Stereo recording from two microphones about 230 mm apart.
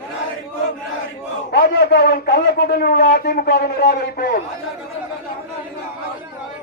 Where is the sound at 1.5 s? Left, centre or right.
Left.